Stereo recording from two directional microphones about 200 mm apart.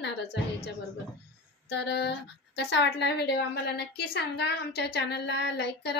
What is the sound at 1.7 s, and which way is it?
A woman's voice, 60° left (ahead or behind).